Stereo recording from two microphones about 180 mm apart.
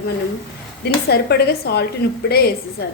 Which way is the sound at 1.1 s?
65° left (ahead or behind).